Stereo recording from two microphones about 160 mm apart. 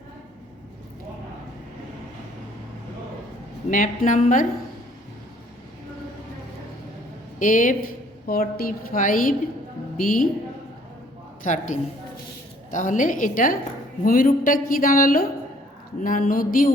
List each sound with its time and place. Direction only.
3.7 s speech: 55° left (ahead or behind)
7.3 s a woman's voice: 55° left (ahead or behind)
11.4 s a woman's voice: 50° left (ahead or behind)